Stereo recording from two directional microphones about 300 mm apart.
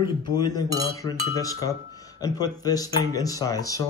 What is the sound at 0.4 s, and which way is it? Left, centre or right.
Speech, centre.